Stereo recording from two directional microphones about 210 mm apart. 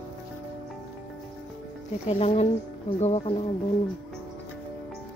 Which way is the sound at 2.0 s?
30° left (ahead or behind).